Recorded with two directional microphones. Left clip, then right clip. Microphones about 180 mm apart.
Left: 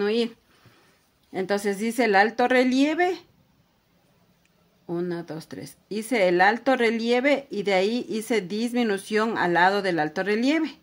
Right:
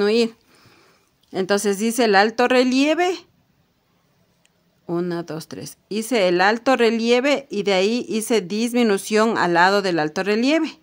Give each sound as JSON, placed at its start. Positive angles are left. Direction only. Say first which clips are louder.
{"t": 0.0, "sound": "speech", "louder": "right 6 dB", "side_deg": -35}
{"t": 4.8, "sound": "speech", "louder": "right 5 dB", "side_deg": -40}